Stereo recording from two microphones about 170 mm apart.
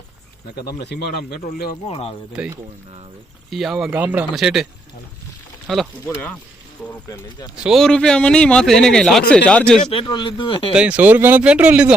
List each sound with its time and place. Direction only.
0.5 s speech: 70° left (ahead or behind)
1.9 s speech: 35° left (ahead or behind)
3.5 s a man's voice: centre (ahead or behind)
7.5 s a man's voice: 5° right (ahead or behind)
9.8 s speech: 30° left (ahead or behind)
10.8 s speech: 5° right (ahead or behind)